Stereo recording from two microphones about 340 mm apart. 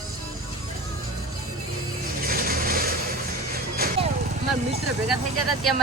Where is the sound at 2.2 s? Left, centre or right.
Right.